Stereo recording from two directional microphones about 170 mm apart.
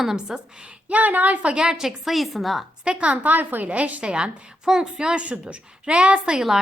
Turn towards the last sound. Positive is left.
turn(degrees=-5)  # may be behind; listen again after turning